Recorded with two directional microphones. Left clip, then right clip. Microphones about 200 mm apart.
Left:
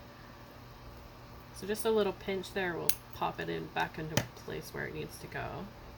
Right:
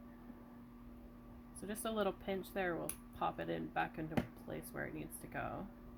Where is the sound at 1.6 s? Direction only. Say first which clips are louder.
Left 9 dB; 50° right (ahead or behind).